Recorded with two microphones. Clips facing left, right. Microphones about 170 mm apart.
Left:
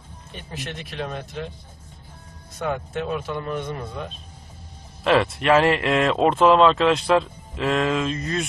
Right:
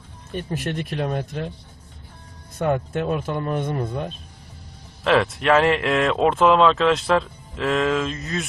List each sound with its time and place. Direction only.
0.3 s speech: 50° right (ahead or behind)
2.6 s speech: 50° right (ahead or behind)
5.0 s speech: centre (ahead or behind)